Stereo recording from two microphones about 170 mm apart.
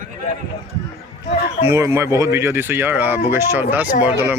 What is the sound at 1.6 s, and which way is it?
Speech, 15° right (ahead or behind).